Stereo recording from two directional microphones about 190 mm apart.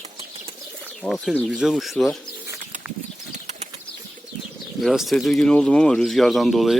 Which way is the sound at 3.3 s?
35° right (ahead or behind).